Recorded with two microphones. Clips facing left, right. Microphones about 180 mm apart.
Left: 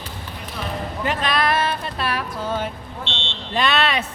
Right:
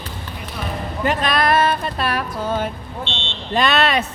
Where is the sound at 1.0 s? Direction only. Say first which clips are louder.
Right 3 dB; 45° right (ahead or behind).